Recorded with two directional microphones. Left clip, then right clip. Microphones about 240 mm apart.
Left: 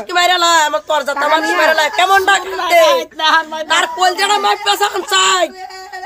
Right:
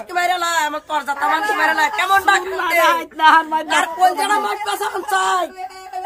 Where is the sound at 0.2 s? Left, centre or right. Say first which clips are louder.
Left 7 dB; centre.